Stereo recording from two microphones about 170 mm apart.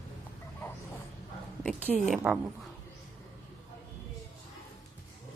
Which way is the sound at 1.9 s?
Centre (ahead or behind).